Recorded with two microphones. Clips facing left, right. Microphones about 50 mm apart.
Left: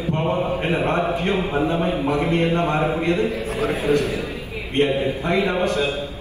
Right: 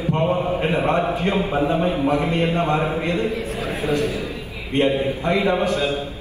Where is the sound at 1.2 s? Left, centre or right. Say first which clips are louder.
Right 1 dB; left.